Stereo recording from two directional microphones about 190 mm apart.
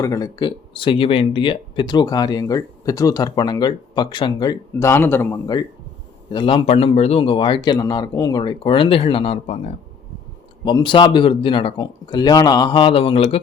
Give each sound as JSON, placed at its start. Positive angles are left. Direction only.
{"t": 0.0, "sound": "speech", "side_deg": 20}
{"t": 4.7, "sound": "a man's voice", "side_deg": 15}
{"t": 10.6, "sound": "speech", "side_deg": 20}